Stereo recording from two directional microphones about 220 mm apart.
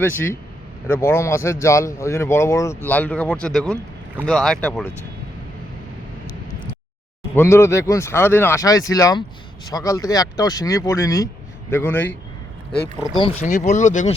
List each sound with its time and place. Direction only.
0.0 s speech: 10° left (ahead or behind)
7.3 s speech: 10° left (ahead or behind)
13.0 s speech: 20° left (ahead or behind)